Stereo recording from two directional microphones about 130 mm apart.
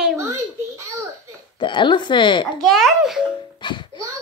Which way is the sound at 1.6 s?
40° left (ahead or behind).